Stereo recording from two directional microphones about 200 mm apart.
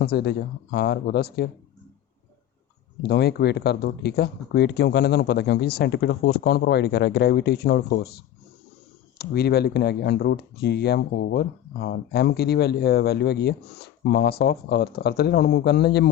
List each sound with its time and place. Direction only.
0.0 s speech: 55° left (ahead or behind)
3.0 s speech: 55° left (ahead or behind)